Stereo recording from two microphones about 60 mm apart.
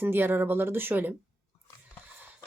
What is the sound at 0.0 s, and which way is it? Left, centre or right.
Speech, right.